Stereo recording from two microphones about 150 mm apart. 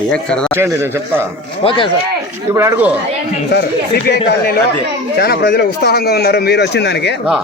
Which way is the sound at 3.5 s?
90° left.